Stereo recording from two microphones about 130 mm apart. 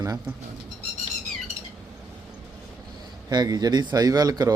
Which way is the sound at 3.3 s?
30° right (ahead or behind).